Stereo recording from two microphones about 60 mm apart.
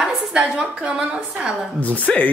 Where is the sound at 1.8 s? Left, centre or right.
Left.